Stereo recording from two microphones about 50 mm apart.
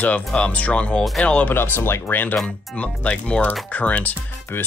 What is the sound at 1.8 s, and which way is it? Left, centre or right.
Speech, left.